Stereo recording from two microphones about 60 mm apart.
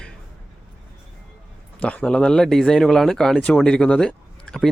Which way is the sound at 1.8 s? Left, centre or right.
Centre.